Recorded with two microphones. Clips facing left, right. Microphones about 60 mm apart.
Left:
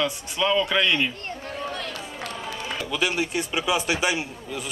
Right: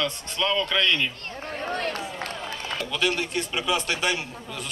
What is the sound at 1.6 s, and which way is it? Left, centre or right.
Run, right.